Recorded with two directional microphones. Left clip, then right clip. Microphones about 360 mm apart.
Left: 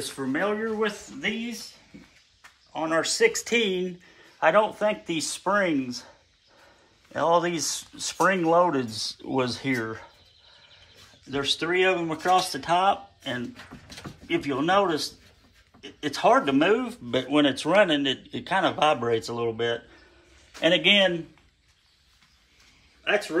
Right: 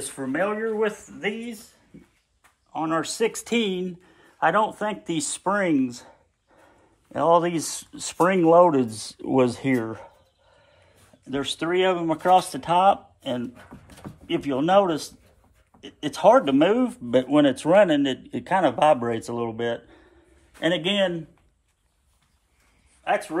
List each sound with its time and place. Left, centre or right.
0.3 s speech: right
2.7 s speech: right
11.2 s speech: right
16.2 s speech: right